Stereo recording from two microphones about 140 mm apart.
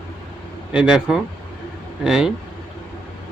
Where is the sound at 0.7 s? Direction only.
5° right (ahead or behind).